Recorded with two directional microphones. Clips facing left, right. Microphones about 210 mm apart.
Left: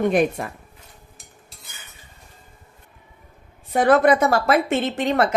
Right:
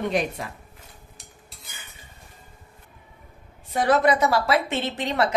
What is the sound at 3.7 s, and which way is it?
A woman's voice, 55° left (ahead or behind).